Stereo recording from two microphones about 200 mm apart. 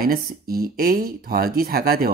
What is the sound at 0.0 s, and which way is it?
Speech, 50° right (ahead or behind).